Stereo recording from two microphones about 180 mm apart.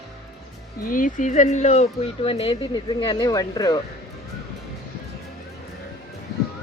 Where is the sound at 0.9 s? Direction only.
45° left (ahead or behind); by 3.8 s 20° left (ahead or behind).